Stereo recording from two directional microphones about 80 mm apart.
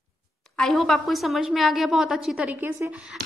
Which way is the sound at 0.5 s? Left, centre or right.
Centre.